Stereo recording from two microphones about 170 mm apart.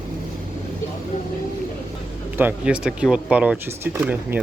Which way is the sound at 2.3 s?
10° right (ahead or behind).